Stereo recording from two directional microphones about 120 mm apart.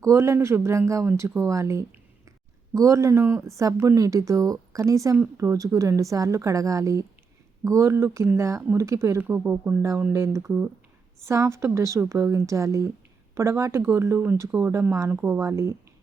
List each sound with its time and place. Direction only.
0.0 s a woman's voice: 25° right (ahead or behind)